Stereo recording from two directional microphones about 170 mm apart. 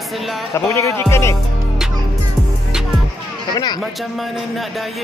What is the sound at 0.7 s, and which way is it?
Speech, 20° left (ahead or behind).